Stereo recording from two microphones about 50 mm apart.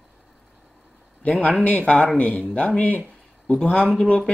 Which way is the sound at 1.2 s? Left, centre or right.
Left.